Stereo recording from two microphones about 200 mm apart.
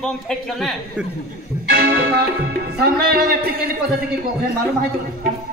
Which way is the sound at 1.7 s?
50° right (ahead or behind).